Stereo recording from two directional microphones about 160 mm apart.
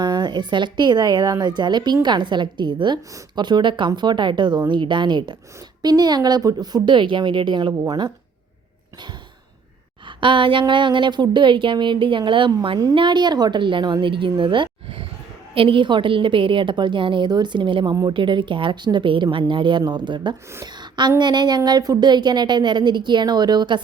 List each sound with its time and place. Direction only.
0.0 s a woman's voice: 25° right (ahead or behind)
10.1 s a woman's voice: 30° right (ahead or behind)
20.5 s a sound: 20° right (ahead or behind)
21.2 s a woman's voice: 25° right (ahead or behind)